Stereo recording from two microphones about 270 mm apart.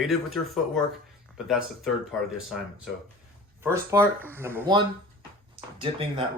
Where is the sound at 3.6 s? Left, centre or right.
Centre.